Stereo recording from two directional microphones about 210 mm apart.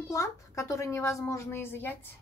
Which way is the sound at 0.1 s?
15° left (ahead or behind).